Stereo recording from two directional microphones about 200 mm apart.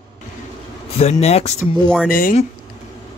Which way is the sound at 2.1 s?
40° left (ahead or behind).